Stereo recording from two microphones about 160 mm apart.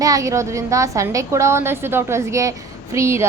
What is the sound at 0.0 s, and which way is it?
Speech, 20° right (ahead or behind).